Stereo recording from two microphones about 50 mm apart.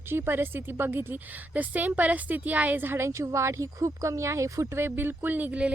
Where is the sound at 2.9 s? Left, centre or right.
Right.